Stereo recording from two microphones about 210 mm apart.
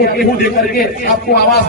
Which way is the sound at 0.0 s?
45° left (ahead or behind).